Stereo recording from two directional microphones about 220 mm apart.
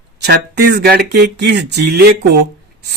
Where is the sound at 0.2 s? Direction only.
50° right (ahead or behind).